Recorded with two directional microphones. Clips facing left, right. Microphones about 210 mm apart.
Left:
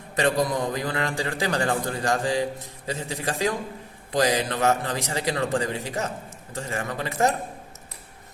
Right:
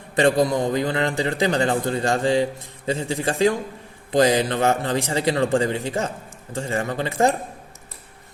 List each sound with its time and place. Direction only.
0.2 s a man's voice: 30° right (ahead or behind)